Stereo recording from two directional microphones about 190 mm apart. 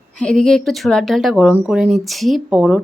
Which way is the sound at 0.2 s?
5° left (ahead or behind).